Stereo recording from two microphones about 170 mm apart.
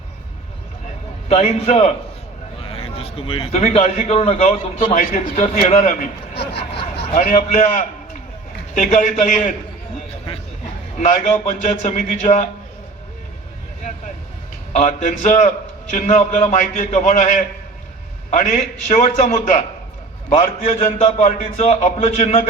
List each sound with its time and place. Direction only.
1.3 s a man's voice: 40° left (ahead or behind)
2.6 s a sound: 35° left (ahead or behind)
3.6 s a man's voice: 40° left (ahead or behind)
6.3 s speech: 75° left (ahead or behind)
7.2 s a man's voice: 45° left (ahead or behind)
10.9 s a man's voice: 40° left (ahead or behind)
14.7 s a man's voice: 45° left (ahead or behind)